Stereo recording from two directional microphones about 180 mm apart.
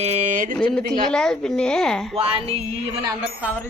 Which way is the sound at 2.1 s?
30° right (ahead or behind).